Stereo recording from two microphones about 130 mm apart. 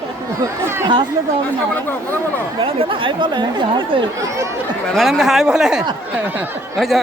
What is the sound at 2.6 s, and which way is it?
Speech, 45° right (ahead or behind).